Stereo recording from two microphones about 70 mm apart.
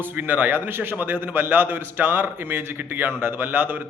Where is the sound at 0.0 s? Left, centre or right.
Right.